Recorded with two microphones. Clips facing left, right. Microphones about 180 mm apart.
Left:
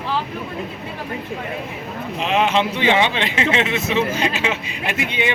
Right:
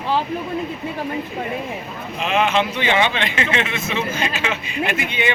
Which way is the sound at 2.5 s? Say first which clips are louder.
Left 2 dB; 30° left (ahead or behind).